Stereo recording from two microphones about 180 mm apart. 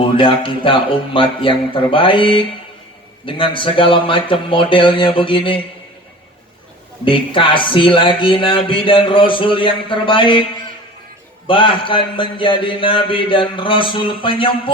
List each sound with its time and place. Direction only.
0.0 s speech: 30° left (ahead or behind)
7.0 s speech: 30° left (ahead or behind)
11.4 s speech: 30° left (ahead or behind)